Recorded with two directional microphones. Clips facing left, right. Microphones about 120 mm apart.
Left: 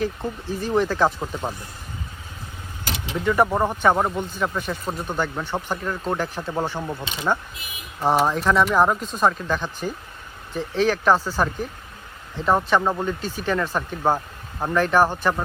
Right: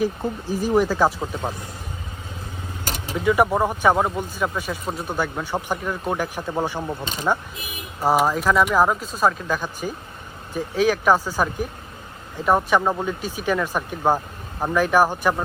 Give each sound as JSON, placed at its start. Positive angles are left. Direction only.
{"t": 0.0, "sound": "speech", "side_deg": -10}
{"t": 2.8, "sound": "vehicle", "side_deg": -45}
{"t": 3.2, "sound": "speech", "side_deg": -10}
{"t": 7.0, "sound": "speech", "side_deg": -45}
{"t": 8.0, "sound": "speech", "side_deg": -5}